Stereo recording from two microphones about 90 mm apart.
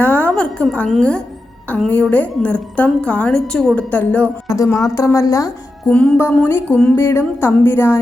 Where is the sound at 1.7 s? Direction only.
15° left (ahead or behind).